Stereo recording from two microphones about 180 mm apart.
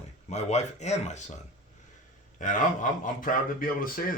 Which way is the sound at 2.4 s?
45° left (ahead or behind).